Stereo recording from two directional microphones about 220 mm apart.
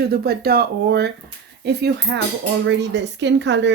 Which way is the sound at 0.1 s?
45° right (ahead or behind).